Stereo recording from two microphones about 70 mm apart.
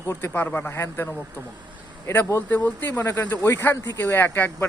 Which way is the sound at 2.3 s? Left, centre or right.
Left.